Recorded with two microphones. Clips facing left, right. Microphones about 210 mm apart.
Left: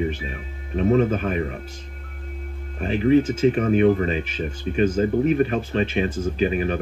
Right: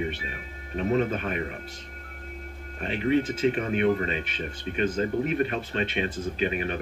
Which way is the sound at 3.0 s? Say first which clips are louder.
Left 6 dB; 40° left (ahead or behind).